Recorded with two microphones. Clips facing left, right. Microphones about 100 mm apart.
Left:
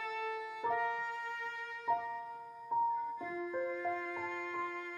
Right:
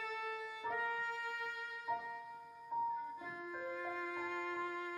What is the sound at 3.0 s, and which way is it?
Music, 5° right (ahead or behind).